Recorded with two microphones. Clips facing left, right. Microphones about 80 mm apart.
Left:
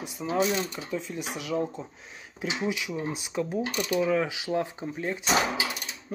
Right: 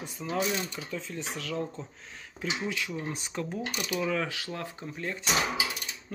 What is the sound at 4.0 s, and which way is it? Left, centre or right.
Speech, centre.